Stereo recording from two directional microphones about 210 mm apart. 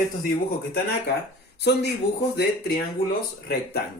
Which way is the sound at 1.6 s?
50° left (ahead or behind).